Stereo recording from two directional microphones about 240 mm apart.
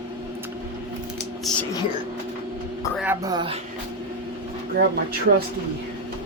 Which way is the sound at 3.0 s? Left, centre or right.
Centre.